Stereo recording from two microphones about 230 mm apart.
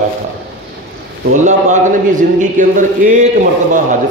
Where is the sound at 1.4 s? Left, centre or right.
Right.